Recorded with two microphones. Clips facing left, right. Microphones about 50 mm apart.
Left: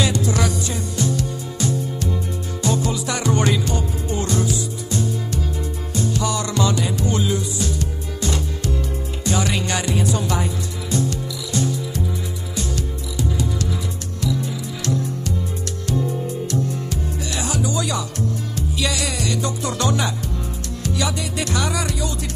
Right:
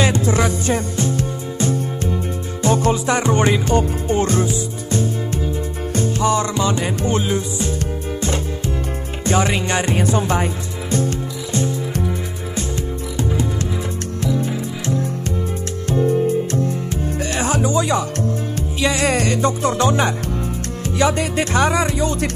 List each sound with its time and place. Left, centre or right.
0.0 s music: right
6.8 s music: right
9.2 s speech: right
11.9 s music: right
12.7 s music: right